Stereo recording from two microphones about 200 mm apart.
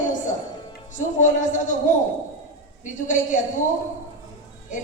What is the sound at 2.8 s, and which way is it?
Speech, 40° left (ahead or behind).